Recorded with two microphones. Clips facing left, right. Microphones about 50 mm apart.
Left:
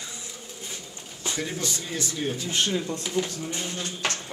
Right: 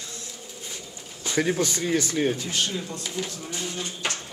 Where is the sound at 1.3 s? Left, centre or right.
Right.